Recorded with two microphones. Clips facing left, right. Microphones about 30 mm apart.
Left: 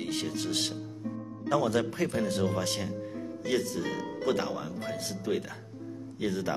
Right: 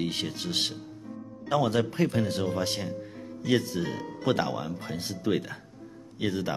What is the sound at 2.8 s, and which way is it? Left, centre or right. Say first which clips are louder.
Music: even; centre.